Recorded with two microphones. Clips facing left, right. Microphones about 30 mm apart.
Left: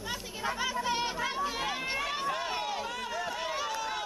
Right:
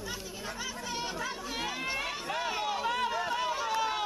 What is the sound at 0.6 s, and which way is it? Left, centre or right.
Chatter, left.